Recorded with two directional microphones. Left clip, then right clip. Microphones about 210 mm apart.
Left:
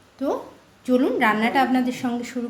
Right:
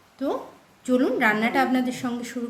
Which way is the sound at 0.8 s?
5° right (ahead or behind).